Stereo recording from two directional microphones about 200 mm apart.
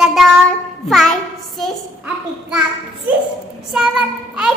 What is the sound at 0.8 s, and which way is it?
A child's voice, centre (ahead or behind).